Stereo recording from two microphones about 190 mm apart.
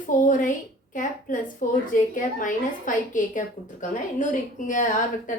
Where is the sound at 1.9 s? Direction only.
45° left (ahead or behind).